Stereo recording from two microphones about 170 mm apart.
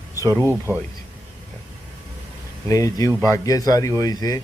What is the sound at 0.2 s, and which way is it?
Speech, 20° right (ahead or behind).